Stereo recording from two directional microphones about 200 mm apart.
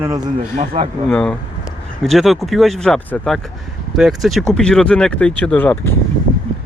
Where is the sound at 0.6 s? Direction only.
30° right (ahead or behind).